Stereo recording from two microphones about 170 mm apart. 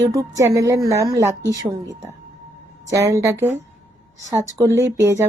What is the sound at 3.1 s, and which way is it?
A woman's voice, 15° right (ahead or behind).